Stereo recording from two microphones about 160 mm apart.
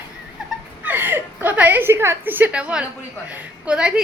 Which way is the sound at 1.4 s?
10° right (ahead or behind).